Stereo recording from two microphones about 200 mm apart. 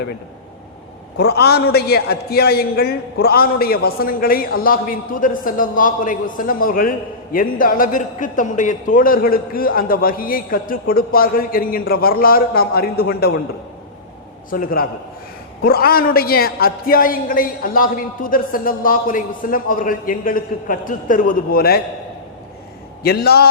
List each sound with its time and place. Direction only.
1.2 s a man's voice: 55° left (ahead or behind)
14.5 s a man's voice: 45° left (ahead or behind)
23.0 s a man's voice: 50° left (ahead or behind)